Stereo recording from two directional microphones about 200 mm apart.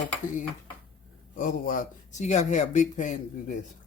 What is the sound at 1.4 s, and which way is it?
Speech, 40° left (ahead or behind).